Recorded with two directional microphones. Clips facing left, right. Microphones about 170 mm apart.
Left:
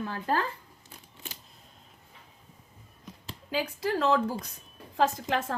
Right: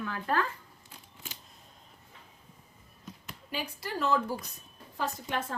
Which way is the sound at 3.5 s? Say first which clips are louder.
Left 7 dB; 90° left.